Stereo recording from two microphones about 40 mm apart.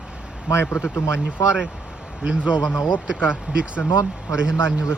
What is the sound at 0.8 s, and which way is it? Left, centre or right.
Speech, left.